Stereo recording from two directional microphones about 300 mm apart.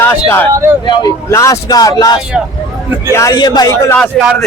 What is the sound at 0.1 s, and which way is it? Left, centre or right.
Speech, centre.